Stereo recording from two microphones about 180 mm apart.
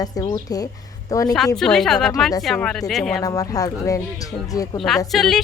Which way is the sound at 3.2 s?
20° left (ahead or behind).